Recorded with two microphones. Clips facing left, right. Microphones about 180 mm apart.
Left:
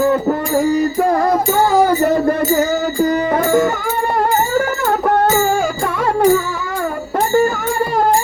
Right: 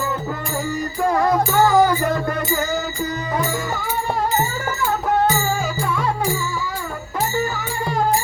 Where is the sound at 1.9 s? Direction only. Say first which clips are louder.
Left 7 dB; 40° left (ahead or behind).